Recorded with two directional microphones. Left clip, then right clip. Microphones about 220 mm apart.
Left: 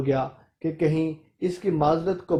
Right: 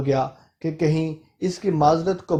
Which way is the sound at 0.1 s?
30° right (ahead or behind).